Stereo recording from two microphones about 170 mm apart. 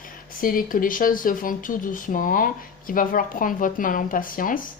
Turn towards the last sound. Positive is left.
turn(degrees=55)  # may be behind; listen again after turning